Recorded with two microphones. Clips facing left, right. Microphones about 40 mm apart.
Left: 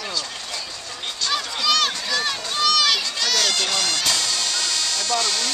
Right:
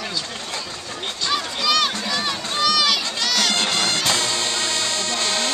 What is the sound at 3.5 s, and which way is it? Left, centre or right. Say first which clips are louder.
Music: right 2 dB; right.